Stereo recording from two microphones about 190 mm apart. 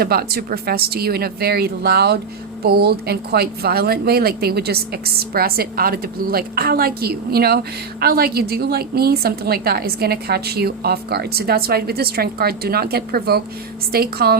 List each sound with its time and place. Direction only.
0.0 s speech: 55° right (ahead or behind)